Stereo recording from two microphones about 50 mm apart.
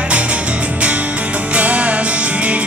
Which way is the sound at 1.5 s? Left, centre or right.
Right.